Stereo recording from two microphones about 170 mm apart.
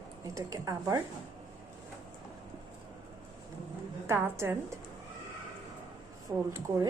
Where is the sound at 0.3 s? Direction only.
20° right (ahead or behind).